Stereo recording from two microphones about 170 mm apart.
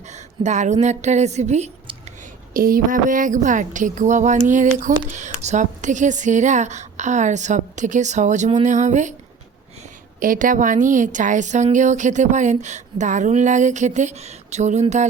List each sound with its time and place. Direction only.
0.1 s a woman's voice: 45° right (ahead or behind)
2.5 s a woman's voice: 55° right (ahead or behind)
10.2 s a woman's voice: 55° right (ahead or behind)